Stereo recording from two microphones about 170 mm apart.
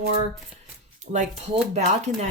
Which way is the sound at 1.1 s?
45° right (ahead or behind).